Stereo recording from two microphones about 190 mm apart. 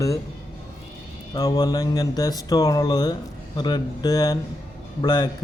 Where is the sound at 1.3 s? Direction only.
20° left (ahead or behind).